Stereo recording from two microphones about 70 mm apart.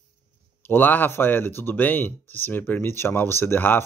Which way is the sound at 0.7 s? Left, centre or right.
Left.